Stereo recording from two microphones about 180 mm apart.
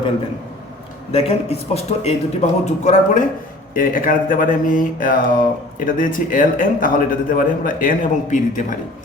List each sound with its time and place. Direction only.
1.1 s a man's voice: 35° left (ahead or behind)